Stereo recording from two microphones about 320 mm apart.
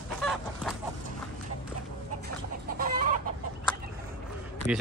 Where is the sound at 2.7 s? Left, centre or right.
Right.